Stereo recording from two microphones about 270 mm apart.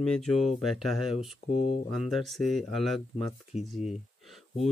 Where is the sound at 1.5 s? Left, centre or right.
Left.